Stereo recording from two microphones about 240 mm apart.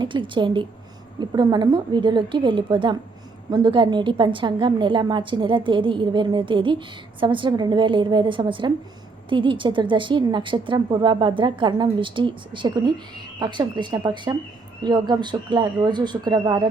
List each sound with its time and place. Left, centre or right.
0.0 s a woman's voice: centre